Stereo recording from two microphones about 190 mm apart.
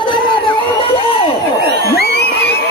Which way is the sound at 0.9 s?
30° left (ahead or behind).